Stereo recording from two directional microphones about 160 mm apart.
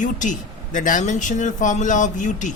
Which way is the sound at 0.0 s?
50° left (ahead or behind).